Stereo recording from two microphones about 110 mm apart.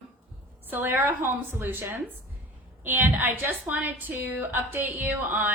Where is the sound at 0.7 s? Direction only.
20° right (ahead or behind).